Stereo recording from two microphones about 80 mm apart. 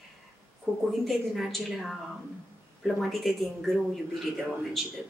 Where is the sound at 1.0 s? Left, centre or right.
Centre.